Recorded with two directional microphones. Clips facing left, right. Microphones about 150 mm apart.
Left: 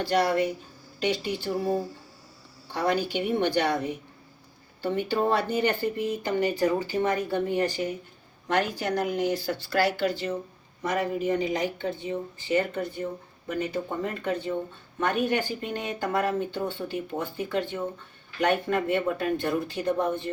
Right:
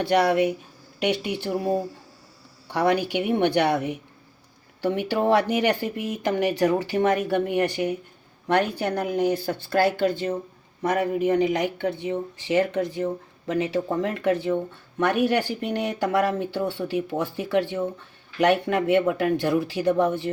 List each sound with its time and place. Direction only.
0.0 s a woman's voice: 65° right (ahead or behind)
2.6 s a woman's voice: 65° right (ahead or behind)